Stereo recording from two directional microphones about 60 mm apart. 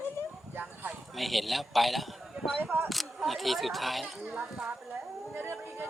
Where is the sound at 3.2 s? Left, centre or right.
Centre.